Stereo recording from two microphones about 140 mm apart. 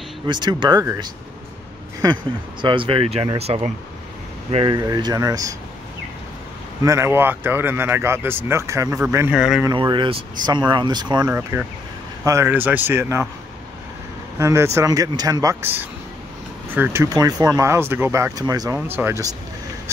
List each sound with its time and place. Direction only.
0.3 s speech: 30° right (ahead or behind)
2.6 s speech: 35° right (ahead or behind)
4.7 s speech: 30° right (ahead or behind)
6.8 s speech: 20° right (ahead or behind)
9.3 s speech: 5° right (ahead or behind)
9.7 s speech: 35° right (ahead or behind)
11.2 s speech: 15° right (ahead or behind)
14.4 s speech: 20° right (ahead or behind)
16.7 s speech: 15° right (ahead or behind)
18.8 s speech: 15° right (ahead or behind)